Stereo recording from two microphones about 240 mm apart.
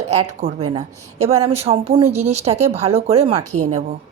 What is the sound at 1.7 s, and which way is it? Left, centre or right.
Speech, right.